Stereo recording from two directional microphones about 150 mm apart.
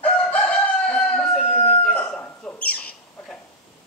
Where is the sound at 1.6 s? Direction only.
10° left (ahead or behind).